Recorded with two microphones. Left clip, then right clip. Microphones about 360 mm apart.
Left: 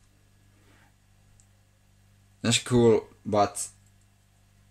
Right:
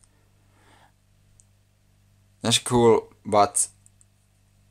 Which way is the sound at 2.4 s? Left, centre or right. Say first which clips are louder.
Right 3 dB; centre.